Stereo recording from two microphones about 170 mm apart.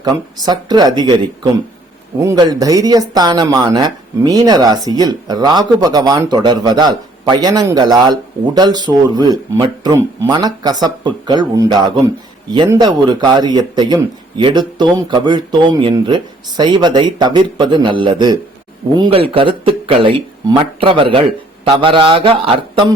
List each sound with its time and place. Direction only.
0.0 s speech: 25° right (ahead or behind)